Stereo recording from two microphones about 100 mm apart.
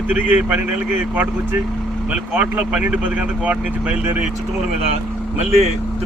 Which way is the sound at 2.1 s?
15° right (ahead or behind).